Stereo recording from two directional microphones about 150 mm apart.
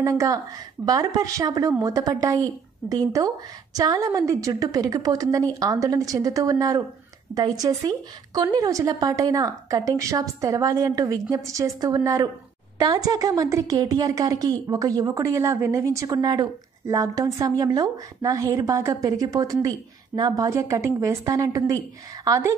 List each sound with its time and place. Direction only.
0.0 s a woman's voice: 20° right (ahead or behind)